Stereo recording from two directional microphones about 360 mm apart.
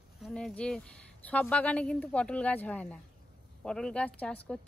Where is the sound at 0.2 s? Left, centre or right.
Centre.